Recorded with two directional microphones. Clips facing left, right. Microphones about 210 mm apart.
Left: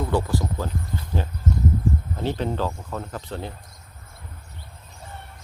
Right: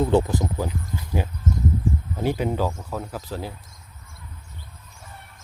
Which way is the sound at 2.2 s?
10° right (ahead or behind).